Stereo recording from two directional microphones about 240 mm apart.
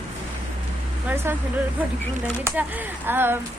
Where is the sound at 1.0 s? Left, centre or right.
Centre.